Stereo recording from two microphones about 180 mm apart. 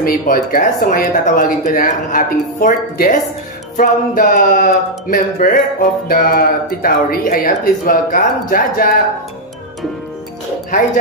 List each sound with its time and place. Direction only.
0.0 s speech: 55° left (ahead or behind)